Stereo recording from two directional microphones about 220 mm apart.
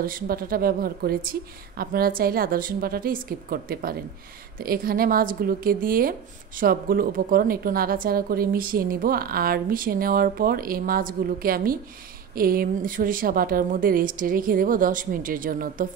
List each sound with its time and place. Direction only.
0.0 s speech: 40° right (ahead or behind)